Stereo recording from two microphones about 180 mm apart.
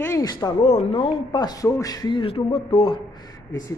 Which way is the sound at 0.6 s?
35° left (ahead or behind).